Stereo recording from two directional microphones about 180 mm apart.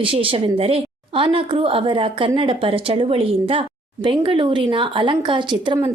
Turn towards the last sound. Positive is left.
turn(degrees=-25)  # may be behind; listen again after turning